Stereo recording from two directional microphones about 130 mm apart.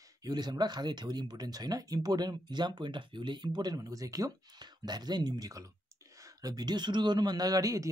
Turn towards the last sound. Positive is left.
turn(degrees=-25)  # may be behind; listen again after turning